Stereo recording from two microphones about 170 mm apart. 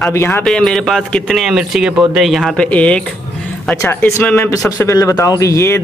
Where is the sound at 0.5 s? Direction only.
Centre (ahead or behind).